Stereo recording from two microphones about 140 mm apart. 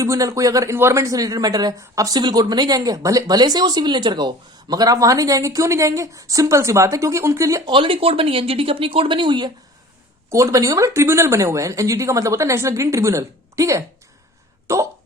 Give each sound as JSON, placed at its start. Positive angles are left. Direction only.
{"t": 0.0, "sound": "speech", "side_deg": -25}
{"t": 7.7, "sound": "speech", "side_deg": -40}
{"t": 10.2, "sound": "speech", "side_deg": -20}